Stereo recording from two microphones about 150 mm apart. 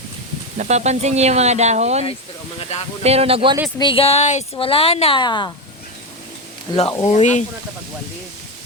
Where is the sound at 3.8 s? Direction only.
35° left (ahead or behind).